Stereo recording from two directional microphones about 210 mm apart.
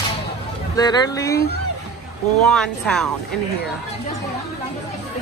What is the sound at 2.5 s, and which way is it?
Speech, 5° left (ahead or behind).